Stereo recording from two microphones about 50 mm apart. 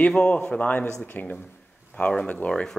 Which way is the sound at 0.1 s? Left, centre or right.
Centre.